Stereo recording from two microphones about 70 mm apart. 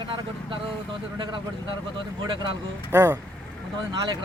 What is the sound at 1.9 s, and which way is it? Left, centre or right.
Speech, right.